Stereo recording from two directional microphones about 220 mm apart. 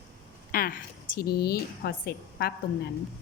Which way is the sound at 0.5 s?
40° left (ahead or behind).